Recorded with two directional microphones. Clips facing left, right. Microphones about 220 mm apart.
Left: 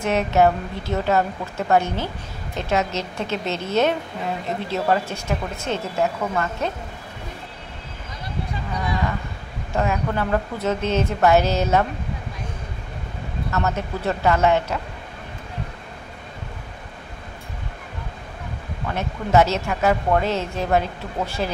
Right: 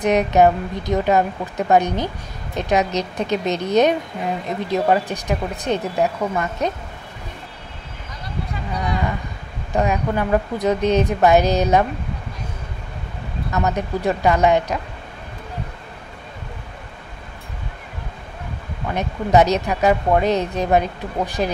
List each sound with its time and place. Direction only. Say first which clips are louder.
0.0 s a woman's voice: right 3 dB; 15° right (ahead or behind)
9.7 s a woman's voice: right 3 dB; 15° right (ahead or behind)
13.5 s a woman's voice: right 3 dB; 15° right (ahead or behind)
18.9 s a woman's voice: right 2 dB; 15° right (ahead or behind)